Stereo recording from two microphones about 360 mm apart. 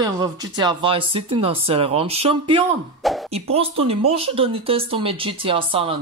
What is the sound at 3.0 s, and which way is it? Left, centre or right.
Plop, centre.